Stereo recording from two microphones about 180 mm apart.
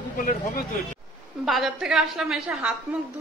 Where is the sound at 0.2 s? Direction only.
55° left (ahead or behind).